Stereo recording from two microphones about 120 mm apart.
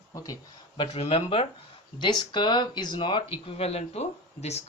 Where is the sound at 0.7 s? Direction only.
55° left (ahead or behind).